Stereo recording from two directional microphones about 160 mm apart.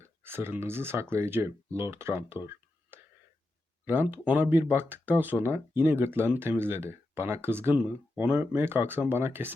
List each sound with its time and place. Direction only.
0.0 s speech: 15° right (ahead or behind)